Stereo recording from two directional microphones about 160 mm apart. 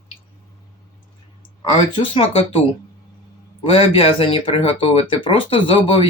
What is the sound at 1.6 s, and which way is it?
Speech, 35° left (ahead or behind).